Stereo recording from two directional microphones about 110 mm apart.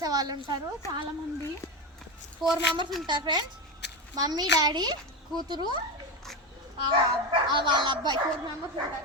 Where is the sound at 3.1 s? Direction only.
45° right (ahead or behind).